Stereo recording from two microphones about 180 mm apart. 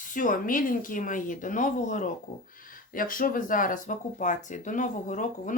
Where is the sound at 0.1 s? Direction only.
45° left (ahead or behind).